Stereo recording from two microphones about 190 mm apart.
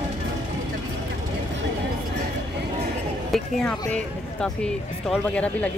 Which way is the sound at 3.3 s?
Centre (ahead or behind).